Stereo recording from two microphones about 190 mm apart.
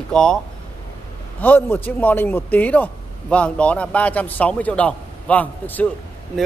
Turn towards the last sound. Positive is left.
turn(degrees=10)  # may be behind; listen again after turning